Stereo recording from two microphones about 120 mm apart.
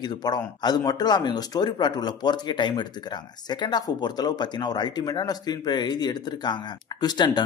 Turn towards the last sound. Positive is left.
turn(degrees=35)  # may be behind; listen again after turning